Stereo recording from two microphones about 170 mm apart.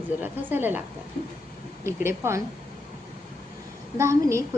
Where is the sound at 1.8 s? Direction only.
15° right (ahead or behind).